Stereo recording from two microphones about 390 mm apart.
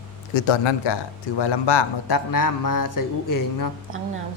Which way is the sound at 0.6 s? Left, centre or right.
Left.